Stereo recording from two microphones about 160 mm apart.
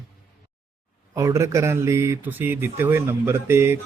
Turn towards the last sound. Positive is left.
turn(degrees=-15)  # may be behind; listen again after turning